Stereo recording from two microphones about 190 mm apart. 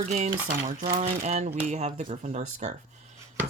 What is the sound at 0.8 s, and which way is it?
Speech, 40° right (ahead or behind).